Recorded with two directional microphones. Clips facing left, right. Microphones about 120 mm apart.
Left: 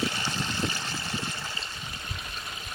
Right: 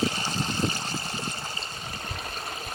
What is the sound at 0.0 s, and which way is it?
Vehicle, 35° right (ahead or behind).